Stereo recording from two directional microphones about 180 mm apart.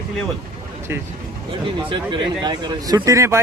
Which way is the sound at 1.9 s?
25° right (ahead or behind).